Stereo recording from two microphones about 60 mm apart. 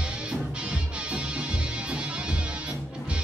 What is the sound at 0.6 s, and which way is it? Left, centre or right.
Music, centre.